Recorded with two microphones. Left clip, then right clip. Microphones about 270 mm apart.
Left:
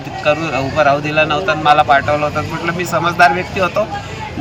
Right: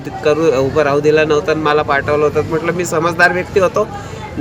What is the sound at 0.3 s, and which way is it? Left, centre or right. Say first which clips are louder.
A man's voice: right 3 dB; centre.